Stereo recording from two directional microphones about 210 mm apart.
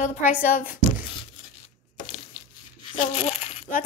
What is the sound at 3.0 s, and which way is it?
Crumpling, 30° left (ahead or behind).